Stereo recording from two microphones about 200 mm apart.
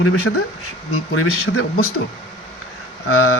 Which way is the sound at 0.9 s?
90° left.